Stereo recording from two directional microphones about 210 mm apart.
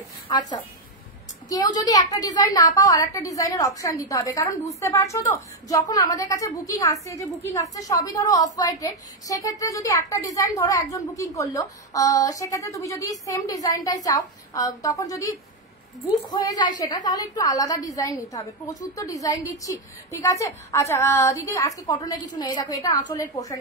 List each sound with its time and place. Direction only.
0.3 s a woman's voice: 20° left (ahead or behind)